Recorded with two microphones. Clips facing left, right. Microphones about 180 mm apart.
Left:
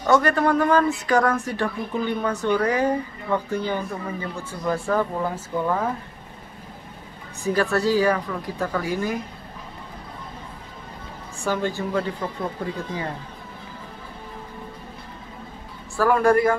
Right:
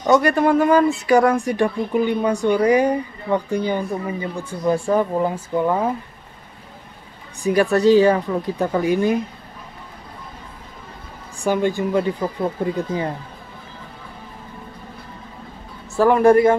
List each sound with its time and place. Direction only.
0.0 s speech: 15° right (ahead or behind)
7.4 s a woman's voice: 15° right (ahead or behind)
11.4 s speech: 15° right (ahead or behind)
16.0 s a woman's voice: 20° right (ahead or behind)